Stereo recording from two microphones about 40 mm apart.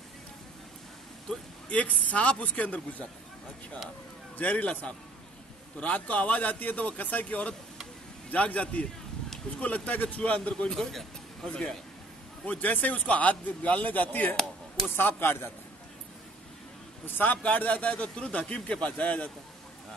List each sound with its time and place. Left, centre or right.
1.7 s speech: left
4.4 s speech: left
10.7 s speech: centre
12.4 s speech: left
15.0 s speech: left
17.0 s speech: left
17.4 s speech: left